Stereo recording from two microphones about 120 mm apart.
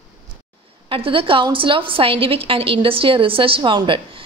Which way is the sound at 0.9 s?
50° right (ahead or behind).